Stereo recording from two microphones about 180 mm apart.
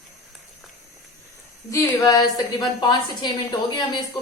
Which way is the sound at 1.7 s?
20° left (ahead or behind).